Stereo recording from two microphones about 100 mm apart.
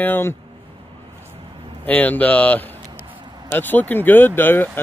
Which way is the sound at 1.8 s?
15° left (ahead or behind).